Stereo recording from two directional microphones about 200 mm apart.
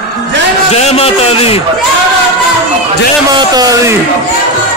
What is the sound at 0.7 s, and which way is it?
Speech, 30° left (ahead or behind).